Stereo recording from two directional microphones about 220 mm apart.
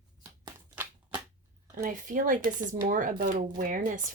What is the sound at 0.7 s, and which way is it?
Shuffling cards, 10° right (ahead or behind).